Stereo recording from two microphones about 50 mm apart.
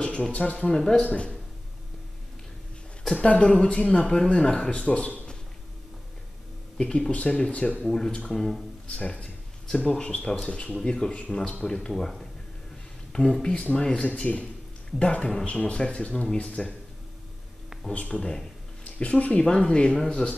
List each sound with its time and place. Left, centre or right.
0.0 s speech: centre
3.2 s speech: left
6.8 s speech: centre
8.8 s a sound: left
9.9 s speech: left
11.9 s speech: centre
13.1 s speech: centre
17.9 s speech: left